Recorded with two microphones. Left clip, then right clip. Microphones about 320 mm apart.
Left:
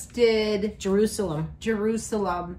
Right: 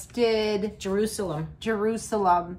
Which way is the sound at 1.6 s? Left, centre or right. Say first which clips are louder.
Even; centre.